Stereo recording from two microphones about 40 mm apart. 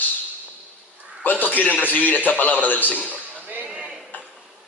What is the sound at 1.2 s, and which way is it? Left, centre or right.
A man's voice, left.